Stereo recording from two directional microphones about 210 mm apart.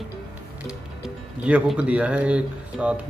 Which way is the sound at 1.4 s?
5° right (ahead or behind).